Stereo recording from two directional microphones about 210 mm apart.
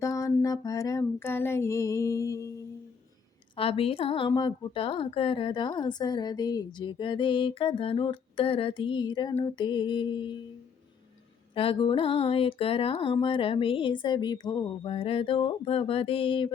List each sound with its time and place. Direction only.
0.0 s a sound: 15° left (ahead or behind)
3.5 s a woman's voice: 25° left (ahead or behind)
11.5 s a woman's voice: 25° left (ahead or behind)